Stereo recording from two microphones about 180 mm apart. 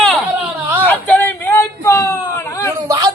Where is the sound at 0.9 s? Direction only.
10° left (ahead or behind).